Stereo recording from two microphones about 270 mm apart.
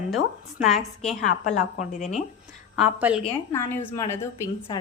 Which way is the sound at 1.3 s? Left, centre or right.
Left.